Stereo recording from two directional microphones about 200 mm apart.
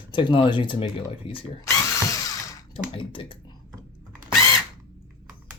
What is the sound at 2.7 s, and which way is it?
Speech, 25° left (ahead or behind).